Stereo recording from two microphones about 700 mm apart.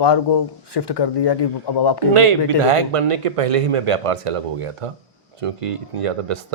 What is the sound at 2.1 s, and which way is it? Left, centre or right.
A man's voice, right.